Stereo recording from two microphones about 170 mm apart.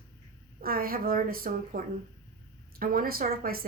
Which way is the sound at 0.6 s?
60° right (ahead or behind).